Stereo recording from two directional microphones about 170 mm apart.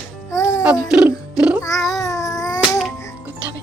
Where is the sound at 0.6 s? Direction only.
5° right (ahead or behind).